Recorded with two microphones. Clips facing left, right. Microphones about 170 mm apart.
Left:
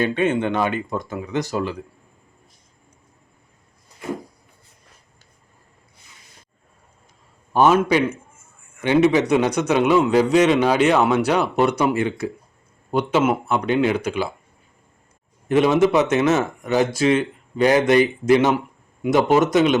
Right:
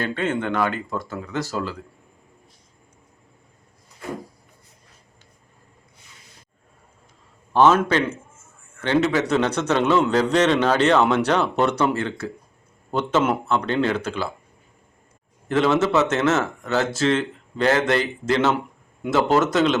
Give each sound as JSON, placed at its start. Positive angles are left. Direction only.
{"t": 0.0, "sound": "a man's voice", "side_deg": 20}
{"t": 7.5, "sound": "a man's voice", "side_deg": 10}
{"t": 15.4, "sound": "a man's voice", "side_deg": 15}